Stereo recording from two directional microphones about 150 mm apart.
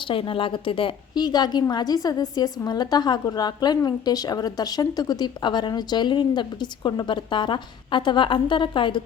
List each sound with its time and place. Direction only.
0.1 s a woman's voice: 35° left (ahead or behind)